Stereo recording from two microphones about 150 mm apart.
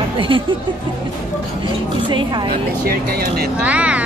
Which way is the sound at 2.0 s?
35° right (ahead or behind).